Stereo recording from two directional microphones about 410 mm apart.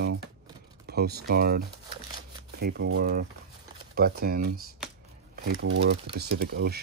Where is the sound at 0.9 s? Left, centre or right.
Right.